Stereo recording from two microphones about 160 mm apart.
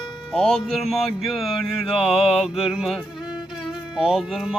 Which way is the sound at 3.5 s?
Centre (ahead or behind).